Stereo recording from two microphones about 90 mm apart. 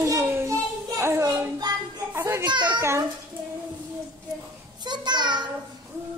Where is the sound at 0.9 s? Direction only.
30° right (ahead or behind).